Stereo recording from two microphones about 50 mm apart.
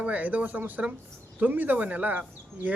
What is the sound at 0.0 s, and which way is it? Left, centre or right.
Speech, right.